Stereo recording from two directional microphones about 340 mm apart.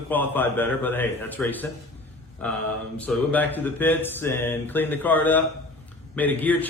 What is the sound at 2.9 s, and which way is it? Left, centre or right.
A man's voice, centre.